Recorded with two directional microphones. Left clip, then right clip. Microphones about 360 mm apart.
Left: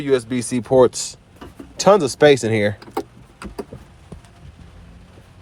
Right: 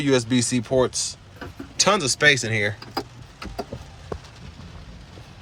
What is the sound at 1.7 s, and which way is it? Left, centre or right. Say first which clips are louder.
Speech: left 6 dB; centre.